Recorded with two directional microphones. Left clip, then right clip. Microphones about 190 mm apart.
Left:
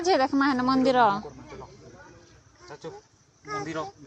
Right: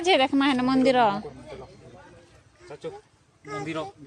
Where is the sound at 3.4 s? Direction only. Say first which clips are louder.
Even; 65° right (ahead or behind).